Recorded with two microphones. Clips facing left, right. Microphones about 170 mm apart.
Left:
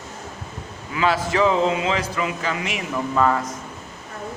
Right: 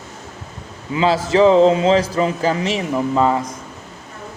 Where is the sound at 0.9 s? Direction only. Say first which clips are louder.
Right 5 dB; 30° right (ahead or behind).